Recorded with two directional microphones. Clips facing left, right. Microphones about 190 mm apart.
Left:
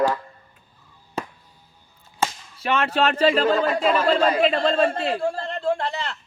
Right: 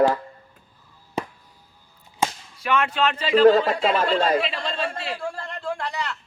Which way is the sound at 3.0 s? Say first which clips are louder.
Left 1 dB; 45° left (ahead or behind).